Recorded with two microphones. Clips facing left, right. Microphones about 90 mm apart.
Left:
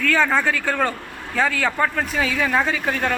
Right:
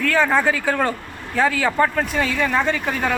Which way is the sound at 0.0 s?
5° right (ahead or behind).